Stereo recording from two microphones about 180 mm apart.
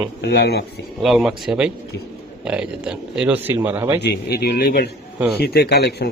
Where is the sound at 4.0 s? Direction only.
60° left (ahead or behind).